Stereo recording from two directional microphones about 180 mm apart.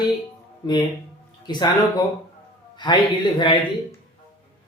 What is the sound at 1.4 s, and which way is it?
Speech, 25° left (ahead or behind).